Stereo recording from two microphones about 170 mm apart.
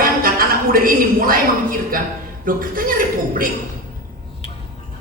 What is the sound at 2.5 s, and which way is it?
A man's voice, 55° right (ahead or behind).